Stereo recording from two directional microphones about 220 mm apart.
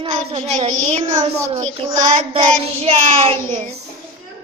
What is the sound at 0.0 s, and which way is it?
A child's voice, 30° right (ahead or behind).